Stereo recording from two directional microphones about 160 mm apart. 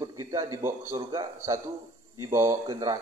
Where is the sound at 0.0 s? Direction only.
25° right (ahead or behind).